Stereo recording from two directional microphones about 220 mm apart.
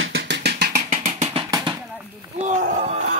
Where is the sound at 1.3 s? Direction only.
20° right (ahead or behind).